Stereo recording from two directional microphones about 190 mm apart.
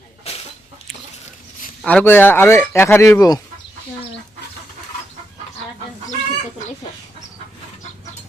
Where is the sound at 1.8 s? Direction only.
5° left (ahead or behind).